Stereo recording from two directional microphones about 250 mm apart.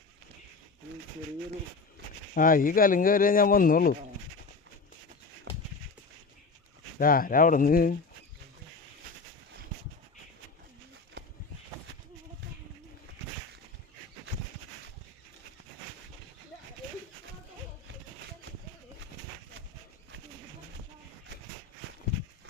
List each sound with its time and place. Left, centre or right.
2.3 s speech: left
7.0 s speech: left